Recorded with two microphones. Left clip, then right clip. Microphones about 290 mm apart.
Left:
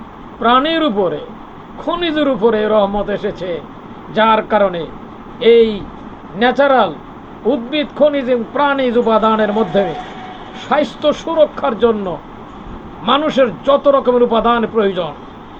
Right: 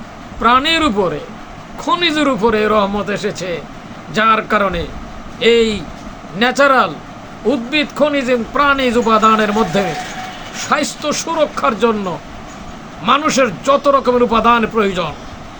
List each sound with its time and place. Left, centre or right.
0.4 s speech: right
13.1 s speech: centre